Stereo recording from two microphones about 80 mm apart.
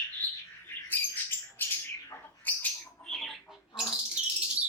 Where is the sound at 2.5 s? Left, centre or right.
Left.